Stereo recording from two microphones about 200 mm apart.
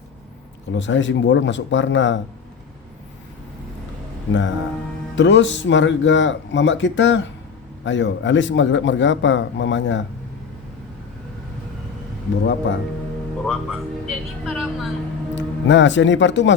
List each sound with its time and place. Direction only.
0.8 s a man's voice: 65° left (ahead or behind)
4.3 s a man's voice: 70° left (ahead or behind)
13.4 s a woman's voice: centre (ahead or behind)
15.4 s speech: 65° left (ahead or behind)